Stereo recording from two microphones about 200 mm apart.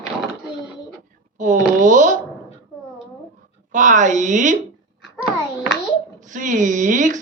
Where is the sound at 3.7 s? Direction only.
40° right (ahead or behind).